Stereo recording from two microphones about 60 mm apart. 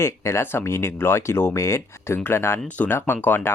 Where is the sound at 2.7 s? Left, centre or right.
Left.